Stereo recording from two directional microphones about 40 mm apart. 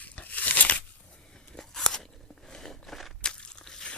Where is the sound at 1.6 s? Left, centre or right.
Centre.